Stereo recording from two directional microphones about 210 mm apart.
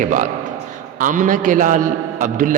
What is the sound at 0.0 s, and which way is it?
A man's voice, 40° right (ahead or behind).